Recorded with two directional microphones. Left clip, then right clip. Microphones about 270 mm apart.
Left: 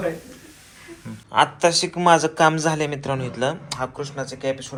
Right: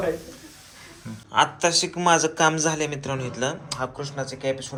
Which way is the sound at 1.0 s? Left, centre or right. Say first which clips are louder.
Left 2 dB; centre.